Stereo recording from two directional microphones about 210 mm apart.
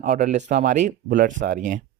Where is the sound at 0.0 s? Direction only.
35° right (ahead or behind).